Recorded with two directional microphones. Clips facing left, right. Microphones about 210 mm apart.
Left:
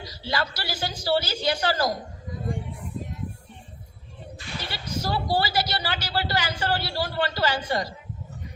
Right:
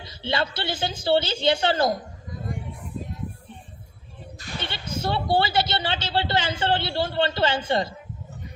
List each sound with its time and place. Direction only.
0.0 s speech: 25° right (ahead or behind)
4.6 s speech: 25° right (ahead or behind)